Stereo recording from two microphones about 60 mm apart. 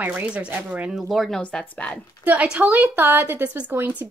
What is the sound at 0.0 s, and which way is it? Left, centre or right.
Speech, right.